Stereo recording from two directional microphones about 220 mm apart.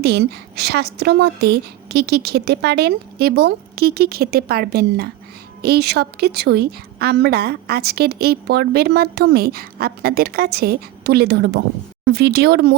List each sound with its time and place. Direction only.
0.0 s a woman's voice: 45° right (ahead or behind)